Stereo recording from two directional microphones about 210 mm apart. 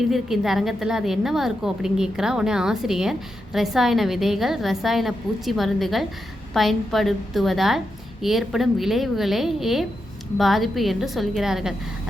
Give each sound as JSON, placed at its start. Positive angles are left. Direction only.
{"t": 0.1, "sound": "a woman's voice", "side_deg": 0}